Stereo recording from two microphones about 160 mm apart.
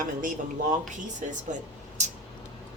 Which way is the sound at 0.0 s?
55° right (ahead or behind).